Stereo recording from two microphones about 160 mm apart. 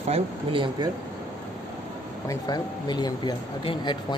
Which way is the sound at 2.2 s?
25° left (ahead or behind).